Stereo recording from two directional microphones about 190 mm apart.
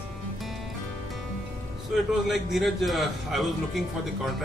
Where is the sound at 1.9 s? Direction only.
Centre (ahead or behind).